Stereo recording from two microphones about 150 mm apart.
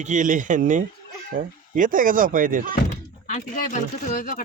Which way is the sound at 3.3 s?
60° left (ahead or behind).